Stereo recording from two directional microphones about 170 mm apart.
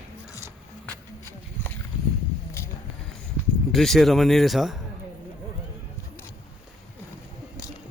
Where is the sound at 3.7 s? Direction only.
Centre (ahead or behind).